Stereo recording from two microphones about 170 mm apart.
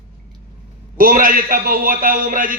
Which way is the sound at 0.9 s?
55° right (ahead or behind).